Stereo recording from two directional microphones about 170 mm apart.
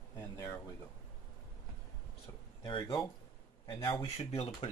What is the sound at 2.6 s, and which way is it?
Speech, 30° left (ahead or behind).